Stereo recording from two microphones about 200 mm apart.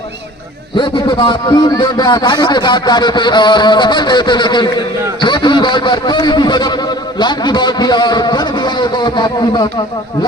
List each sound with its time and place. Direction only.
0.8 s speech: 25° left (ahead or behind)